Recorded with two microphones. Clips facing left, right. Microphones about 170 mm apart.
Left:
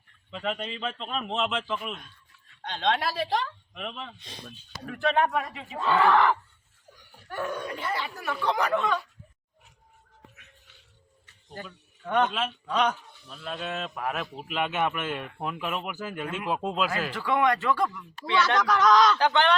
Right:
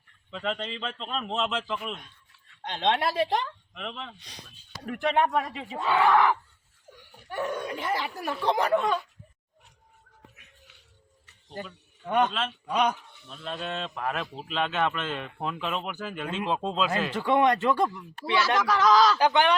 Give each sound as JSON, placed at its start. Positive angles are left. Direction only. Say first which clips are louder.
{"t": 0.3, "sound": "a man's voice", "louder": "even", "side_deg": 10}
{"t": 2.8, "sound": "speech", "louder": "right 2 dB", "side_deg": -20}
{"t": 3.8, "sound": "speech", "louder": "left 1 dB", "side_deg": 5}
{"t": 4.2, "sound": "speech", "louder": "left 4 dB", "side_deg": 25}
{"t": 4.9, "sound": "speech", "louder": "even", "side_deg": -20}
{"t": 5.8, "sound": "speech", "louder": "even", "side_deg": -10}
{"t": 8.0, "sound": "speech", "louder": "right 1 dB", "side_deg": -30}
{"t": 12.0, "sound": "speech", "louder": "even", "side_deg": -10}
{"t": 13.2, "sound": "a man's voice", "louder": "even", "side_deg": 0}
{"t": 17.2, "sound": "speech", "louder": "right 2 dB", "side_deg": -25}
{"t": 18.4, "sound": "a man's voice", "louder": "even", "side_deg": -5}